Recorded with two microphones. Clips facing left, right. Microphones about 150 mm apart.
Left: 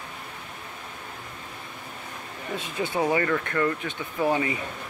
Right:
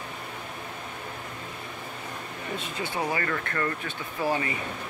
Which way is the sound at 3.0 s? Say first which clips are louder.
Left 6 dB; 25° left (ahead or behind).